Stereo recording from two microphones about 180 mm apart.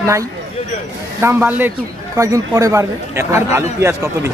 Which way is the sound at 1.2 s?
10° right (ahead or behind).